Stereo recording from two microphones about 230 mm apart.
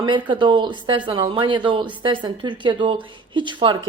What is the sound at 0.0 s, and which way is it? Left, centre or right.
A woman's voice, right.